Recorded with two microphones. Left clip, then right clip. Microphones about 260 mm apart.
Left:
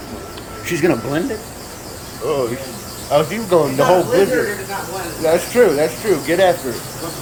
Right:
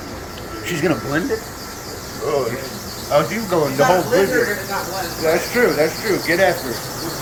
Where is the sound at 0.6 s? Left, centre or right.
Centre.